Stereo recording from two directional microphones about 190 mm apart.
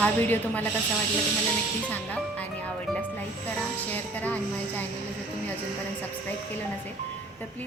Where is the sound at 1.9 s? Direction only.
5° left (ahead or behind).